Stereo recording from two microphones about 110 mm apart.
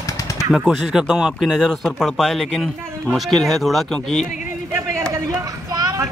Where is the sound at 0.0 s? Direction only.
30° left (ahead or behind).